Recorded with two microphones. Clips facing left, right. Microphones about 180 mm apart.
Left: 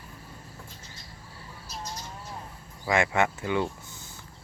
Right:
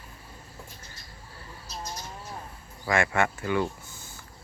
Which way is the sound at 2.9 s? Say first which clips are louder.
Left 1 dB; 20° left (ahead or behind).